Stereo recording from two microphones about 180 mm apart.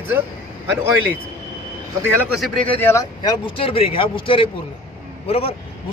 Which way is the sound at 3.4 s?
30° left (ahead or behind).